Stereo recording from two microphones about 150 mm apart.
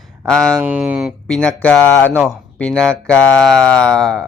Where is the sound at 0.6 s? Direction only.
5° right (ahead or behind).